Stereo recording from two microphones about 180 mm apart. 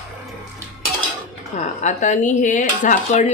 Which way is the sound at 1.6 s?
40° left (ahead or behind).